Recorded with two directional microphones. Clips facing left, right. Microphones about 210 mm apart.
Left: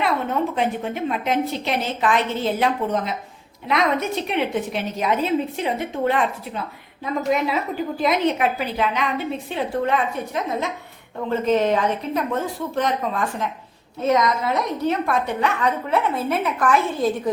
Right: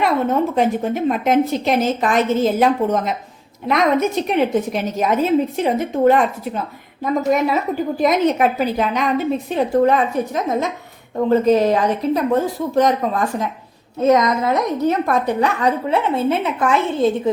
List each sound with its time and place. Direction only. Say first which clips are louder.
0.5 s a woman's voice: right 6 dB; 40° right (ahead or behind); by 17.1 s 25° right (ahead or behind)